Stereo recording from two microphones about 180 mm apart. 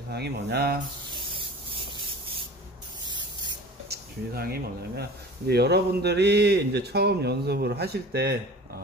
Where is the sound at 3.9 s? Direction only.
55° right (ahead or behind).